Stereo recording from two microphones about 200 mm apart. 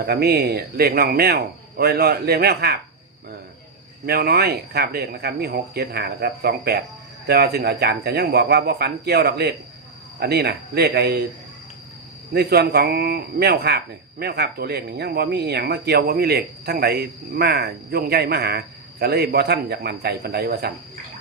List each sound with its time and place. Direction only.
0.0 s speech: 50° right (ahead or behind)
4.0 s speech: 50° right (ahead or behind)
12.3 s speech: 55° right (ahead or behind)